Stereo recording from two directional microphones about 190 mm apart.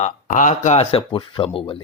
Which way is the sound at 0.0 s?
40° left (ahead or behind).